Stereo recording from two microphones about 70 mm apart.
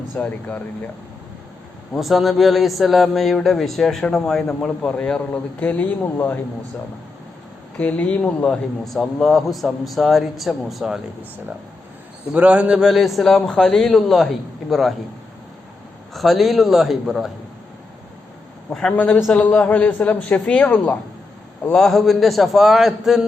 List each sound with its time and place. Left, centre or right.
0.1 s a man's voice: left
2.0 s a man's voice: centre; by 6.4 s left
7.8 s a man's voice: centre
8.9 s speech: centre
12.3 s speech: right; by 14.9 s centre
16.1 s speech: centre
18.7 s a man's voice: centre
19.3 s a man's voice: centre
21.7 s speech: centre